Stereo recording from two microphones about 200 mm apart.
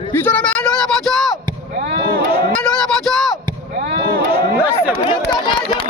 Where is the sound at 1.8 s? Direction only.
60° right (ahead or behind).